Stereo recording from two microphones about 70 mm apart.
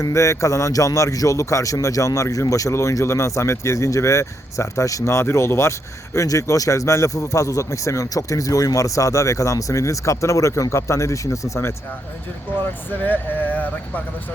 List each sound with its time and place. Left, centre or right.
0.0 s speech: left
6.1 s speech: left
12.6 s speech: left